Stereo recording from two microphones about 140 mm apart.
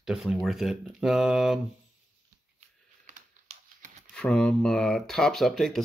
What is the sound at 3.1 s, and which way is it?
Typing, 65° right (ahead or behind).